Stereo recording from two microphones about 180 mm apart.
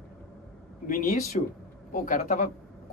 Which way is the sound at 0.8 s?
50° left (ahead or behind).